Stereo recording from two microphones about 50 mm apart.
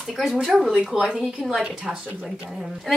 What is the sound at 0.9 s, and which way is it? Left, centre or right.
Speech, centre.